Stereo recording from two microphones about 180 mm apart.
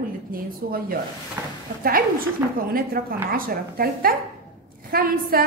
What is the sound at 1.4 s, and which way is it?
Speech, 15° right (ahead or behind).